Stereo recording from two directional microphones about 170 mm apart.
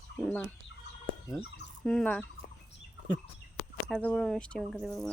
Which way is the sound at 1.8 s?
5° left (ahead or behind).